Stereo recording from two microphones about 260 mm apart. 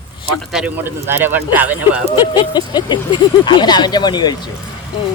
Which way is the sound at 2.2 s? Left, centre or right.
Centre.